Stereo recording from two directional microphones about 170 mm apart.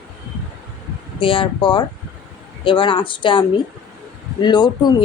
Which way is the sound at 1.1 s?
30° left (ahead or behind).